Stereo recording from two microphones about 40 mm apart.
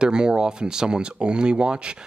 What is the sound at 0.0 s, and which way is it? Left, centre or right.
Speech, right.